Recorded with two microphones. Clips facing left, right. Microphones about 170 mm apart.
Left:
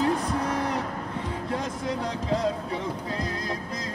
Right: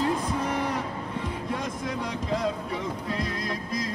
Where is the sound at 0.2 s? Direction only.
10° right (ahead or behind).